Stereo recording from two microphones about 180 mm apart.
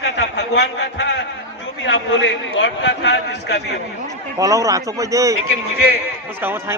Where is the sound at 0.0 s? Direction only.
85° left.